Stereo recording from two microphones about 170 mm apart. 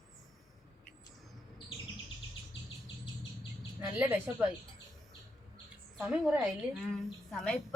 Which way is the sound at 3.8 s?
10° right (ahead or behind).